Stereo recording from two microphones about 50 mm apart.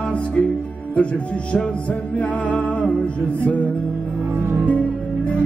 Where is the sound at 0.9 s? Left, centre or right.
Left.